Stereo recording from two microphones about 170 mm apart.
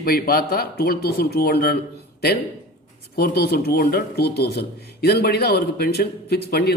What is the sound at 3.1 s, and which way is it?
Speech, 65° left (ahead or behind).